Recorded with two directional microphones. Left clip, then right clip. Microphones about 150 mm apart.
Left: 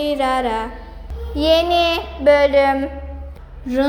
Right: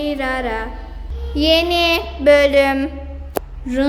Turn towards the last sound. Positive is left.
turn(degrees=-5)  # may be behind; listen again after turning